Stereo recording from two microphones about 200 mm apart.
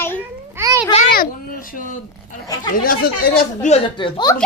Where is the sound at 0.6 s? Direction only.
15° right (ahead or behind).